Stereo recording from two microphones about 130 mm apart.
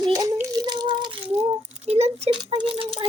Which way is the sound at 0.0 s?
30° right (ahead or behind).